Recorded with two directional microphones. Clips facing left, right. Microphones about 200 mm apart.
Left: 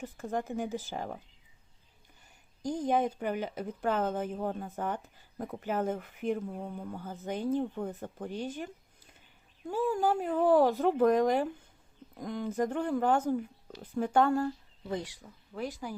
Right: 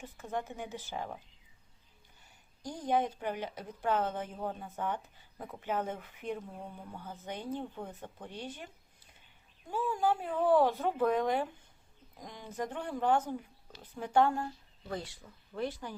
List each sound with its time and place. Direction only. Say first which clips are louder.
0.0 s speech: left 4 dB; 45° left (ahead or behind)
2.6 s speech: left 3 dB; 45° left (ahead or behind)
12.1 s speech: left 9 dB; 55° left (ahead or behind)
14.8 s speech: left 4 dB; 20° left (ahead or behind)